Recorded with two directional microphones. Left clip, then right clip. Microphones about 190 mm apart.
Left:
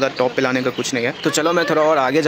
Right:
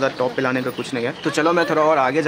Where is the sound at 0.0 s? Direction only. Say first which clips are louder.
Left 2 dB; 15° left (ahead or behind).